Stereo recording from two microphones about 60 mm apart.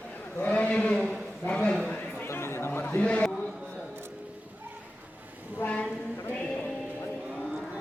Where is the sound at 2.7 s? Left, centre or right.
Left.